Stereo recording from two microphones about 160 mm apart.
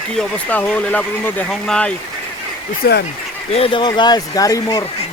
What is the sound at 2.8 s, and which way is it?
Speech, 75° left (ahead or behind).